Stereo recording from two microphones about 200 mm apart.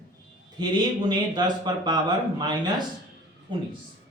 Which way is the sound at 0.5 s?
20° right (ahead or behind).